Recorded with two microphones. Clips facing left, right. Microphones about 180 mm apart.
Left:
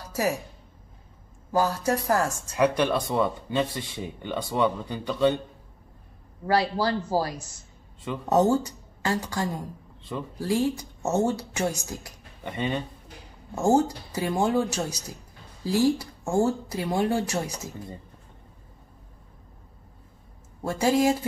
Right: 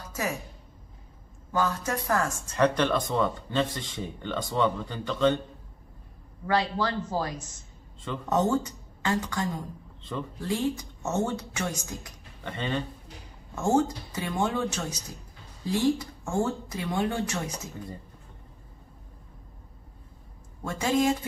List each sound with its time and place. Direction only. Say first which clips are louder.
0.0 s music: left 5 dB; 35° left (ahead or behind)
1.5 s speech: left 4 dB; 35° left (ahead or behind)
2.5 s speech: left 1 dB; 10° left (ahead or behind)
6.4 s speech: left 3 dB; 35° left (ahead or behind)
10.1 s speech: left 1 dB; 15° left (ahead or behind)
10.4 s speech: left 4 dB; 35° left (ahead or behind)
12.4 s speech: left 2 dB; 15° left (ahead or behind)
13.6 s speech: left 3 dB; 35° left (ahead or behind)
16.0 s speech: left 4 dB; 35° left (ahead or behind)
20.6 s speech: left 3 dB; 35° left (ahead or behind)